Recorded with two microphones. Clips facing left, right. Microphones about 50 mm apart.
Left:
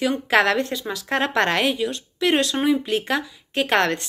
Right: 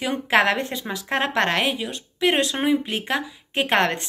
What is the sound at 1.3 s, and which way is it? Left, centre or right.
Speech, centre.